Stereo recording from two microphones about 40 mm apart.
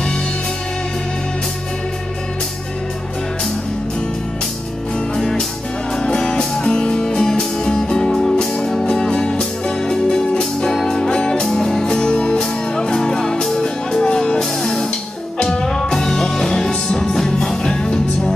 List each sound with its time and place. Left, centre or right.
5.9 s music: centre